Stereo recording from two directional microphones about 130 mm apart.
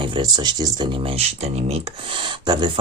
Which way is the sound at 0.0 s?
35° right (ahead or behind).